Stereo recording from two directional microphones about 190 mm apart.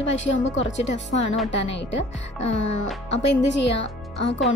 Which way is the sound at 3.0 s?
70° left (ahead or behind).